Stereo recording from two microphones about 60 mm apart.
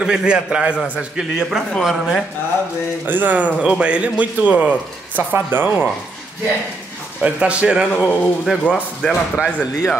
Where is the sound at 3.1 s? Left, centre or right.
Right.